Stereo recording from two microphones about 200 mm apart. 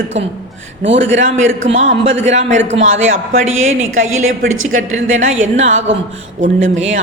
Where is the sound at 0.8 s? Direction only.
65° right (ahead or behind).